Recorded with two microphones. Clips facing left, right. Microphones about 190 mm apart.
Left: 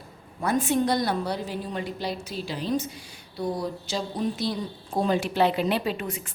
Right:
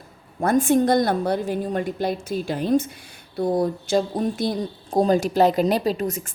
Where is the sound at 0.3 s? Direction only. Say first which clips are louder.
Right 6 dB; 45° right (ahead or behind).